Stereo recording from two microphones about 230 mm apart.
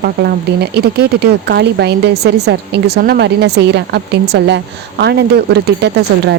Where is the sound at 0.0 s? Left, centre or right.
Right.